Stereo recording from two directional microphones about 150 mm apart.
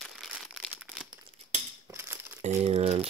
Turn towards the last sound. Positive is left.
turn(degrees=-40)  # may be behind; listen again after turning